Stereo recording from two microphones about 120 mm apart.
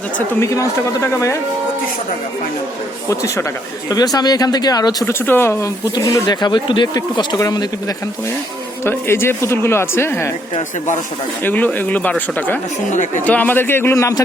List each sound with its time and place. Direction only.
0.3 s speech: 25° left (ahead or behind)
3.1 s speech: 25° left (ahead or behind)
5.2 s speech: 20° left (ahead or behind)
8.8 s speech: 20° left (ahead or behind)
11.4 s speech: 15° left (ahead or behind)
12.9 s speech: 90° left
13.2 s speech: 15° left (ahead or behind)